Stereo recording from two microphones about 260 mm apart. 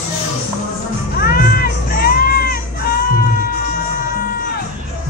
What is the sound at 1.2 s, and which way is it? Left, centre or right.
Music, left.